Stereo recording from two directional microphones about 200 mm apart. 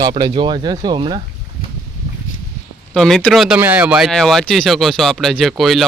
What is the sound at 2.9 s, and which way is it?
Speech, centre (ahead or behind).